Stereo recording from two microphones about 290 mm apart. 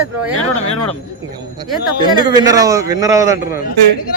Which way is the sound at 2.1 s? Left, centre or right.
Centre.